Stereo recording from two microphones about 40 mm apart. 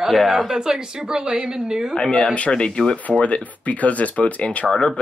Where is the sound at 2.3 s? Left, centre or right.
Left.